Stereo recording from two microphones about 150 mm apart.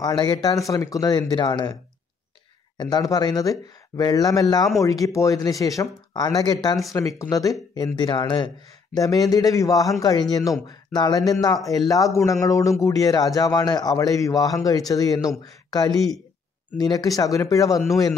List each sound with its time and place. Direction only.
0.0 s a man's voice: 25° left (ahead or behind)
2.8 s a man's voice: 25° left (ahead or behind)